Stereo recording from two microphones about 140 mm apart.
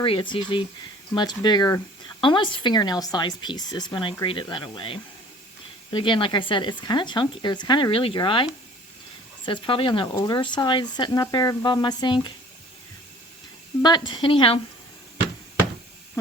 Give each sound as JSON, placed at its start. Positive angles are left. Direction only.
{"t": 0.0, "sound": "speech", "side_deg": 40}
{"t": 9.5, "sound": "speech", "side_deg": 35}
{"t": 13.8, "sound": "speech", "side_deg": 35}